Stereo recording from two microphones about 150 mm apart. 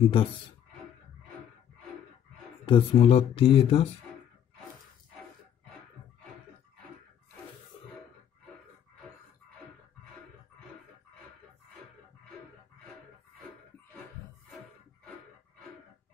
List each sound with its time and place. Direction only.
0.0 s speech: 35° left (ahead or behind)
2.6 s speech: 40° left (ahead or behind)